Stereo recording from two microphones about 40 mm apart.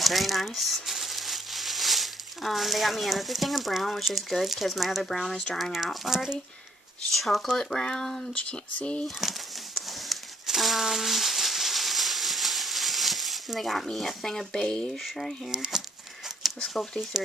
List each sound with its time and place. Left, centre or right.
0.0 s speech: centre
5.6 s speech: centre
7.1 s speech: centre
7.7 s speech: centre
8.4 s speech: left
9.2 s speech: centre
10.4 s a sound: centre
14.2 s speech: centre
15.0 s speech: centre
15.5 s speech: centre